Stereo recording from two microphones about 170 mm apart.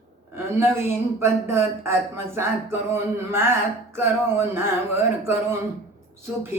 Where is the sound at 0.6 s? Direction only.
15° right (ahead or behind).